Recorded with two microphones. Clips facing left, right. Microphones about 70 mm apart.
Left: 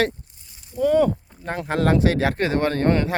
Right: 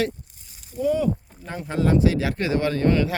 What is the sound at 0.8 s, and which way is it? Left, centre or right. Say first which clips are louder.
Speech: left 4 dB; left.